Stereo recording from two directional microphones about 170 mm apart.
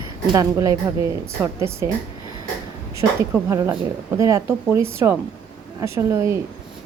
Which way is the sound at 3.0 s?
15° right (ahead or behind).